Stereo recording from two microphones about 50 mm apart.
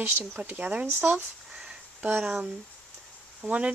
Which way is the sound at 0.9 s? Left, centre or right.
Right.